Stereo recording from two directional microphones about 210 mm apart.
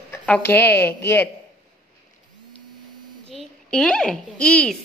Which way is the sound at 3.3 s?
5° left (ahead or behind).